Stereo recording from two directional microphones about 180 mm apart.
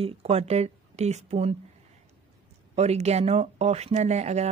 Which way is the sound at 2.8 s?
35° right (ahead or behind).